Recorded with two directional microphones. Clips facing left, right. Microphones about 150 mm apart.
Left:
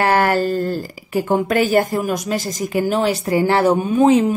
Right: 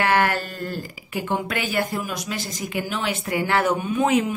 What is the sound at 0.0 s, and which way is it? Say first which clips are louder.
Speech: left 5 dB; 40° left (ahead or behind).